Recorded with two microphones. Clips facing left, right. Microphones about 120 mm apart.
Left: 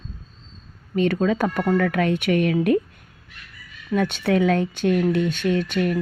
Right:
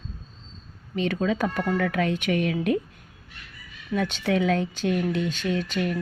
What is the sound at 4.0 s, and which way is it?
Speech, 55° left (ahead or behind).